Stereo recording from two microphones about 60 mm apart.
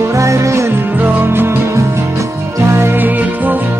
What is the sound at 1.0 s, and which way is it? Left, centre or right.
Music, right.